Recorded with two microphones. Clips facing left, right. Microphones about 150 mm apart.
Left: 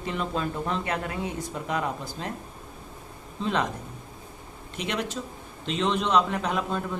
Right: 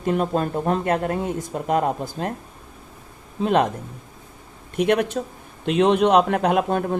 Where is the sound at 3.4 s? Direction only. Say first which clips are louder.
Right 8 dB; 55° right (ahead or behind).